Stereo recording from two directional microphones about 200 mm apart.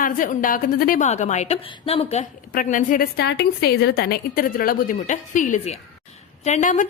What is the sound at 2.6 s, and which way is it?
A woman's voice, 40° left (ahead or behind).